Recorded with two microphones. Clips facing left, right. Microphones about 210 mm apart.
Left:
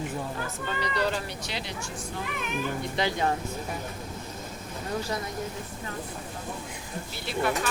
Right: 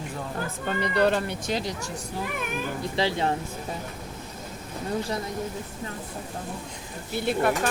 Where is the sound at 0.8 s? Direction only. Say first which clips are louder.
Right 6 dB; 60° right (ahead or behind).